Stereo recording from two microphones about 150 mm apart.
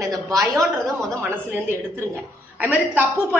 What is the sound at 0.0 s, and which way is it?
Speech, 25° right (ahead or behind).